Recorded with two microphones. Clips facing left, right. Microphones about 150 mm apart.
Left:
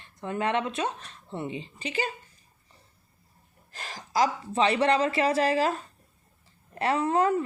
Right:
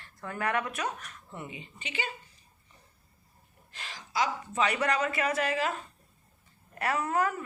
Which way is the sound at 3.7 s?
40° left (ahead or behind).